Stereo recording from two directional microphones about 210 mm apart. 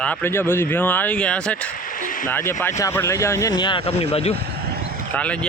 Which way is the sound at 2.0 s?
40° left (ahead or behind).